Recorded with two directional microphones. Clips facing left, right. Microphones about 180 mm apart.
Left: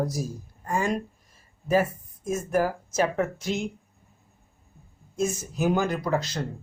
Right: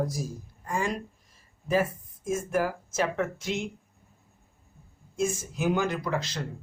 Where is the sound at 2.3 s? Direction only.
40° left (ahead or behind).